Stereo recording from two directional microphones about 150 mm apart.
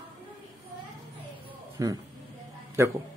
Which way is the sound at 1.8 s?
20° right (ahead or behind).